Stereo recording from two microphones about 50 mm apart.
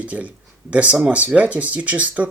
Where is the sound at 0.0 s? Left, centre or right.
Right.